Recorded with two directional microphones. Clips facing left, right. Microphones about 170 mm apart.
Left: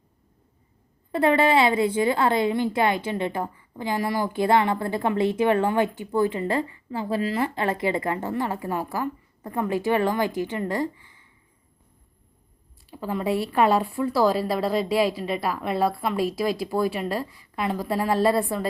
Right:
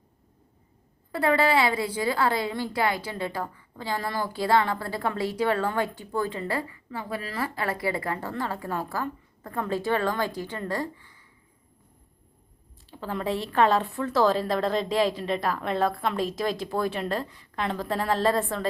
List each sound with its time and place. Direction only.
1.1 s a woman's voice: 25° left (ahead or behind)
12.9 s a woman's voice: 10° left (ahead or behind)